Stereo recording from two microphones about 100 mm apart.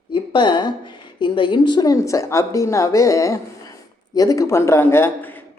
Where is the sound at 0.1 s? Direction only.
50° left (ahead or behind).